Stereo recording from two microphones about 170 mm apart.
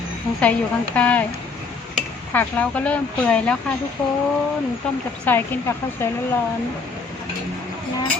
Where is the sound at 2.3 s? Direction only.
10° left (ahead or behind).